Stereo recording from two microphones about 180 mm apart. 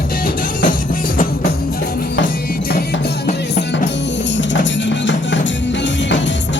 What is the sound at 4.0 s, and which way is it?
Music, 80° left.